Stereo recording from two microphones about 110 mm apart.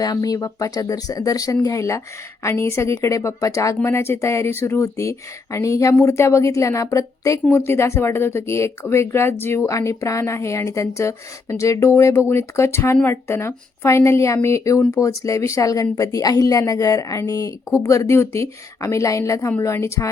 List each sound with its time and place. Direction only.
0.0 s a woman's voice: 35° left (ahead or behind)